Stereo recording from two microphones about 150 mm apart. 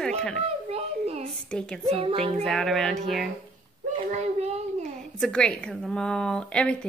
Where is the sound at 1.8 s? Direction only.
40° right (ahead or behind).